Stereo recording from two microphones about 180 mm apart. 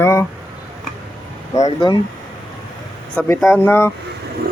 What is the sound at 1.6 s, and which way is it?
Speech, 30° left (ahead or behind).